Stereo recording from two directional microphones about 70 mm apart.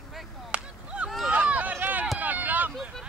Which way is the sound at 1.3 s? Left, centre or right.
Right.